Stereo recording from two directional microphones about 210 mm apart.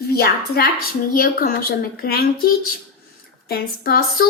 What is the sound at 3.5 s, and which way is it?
Speech, 45° left (ahead or behind).